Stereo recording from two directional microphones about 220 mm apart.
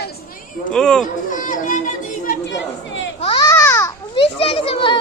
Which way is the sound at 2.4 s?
55° left (ahead or behind).